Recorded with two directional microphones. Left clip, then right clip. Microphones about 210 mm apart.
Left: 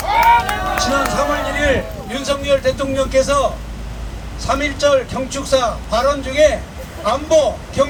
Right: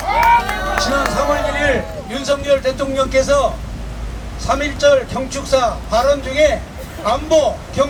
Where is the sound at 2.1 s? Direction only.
25° left (ahead or behind).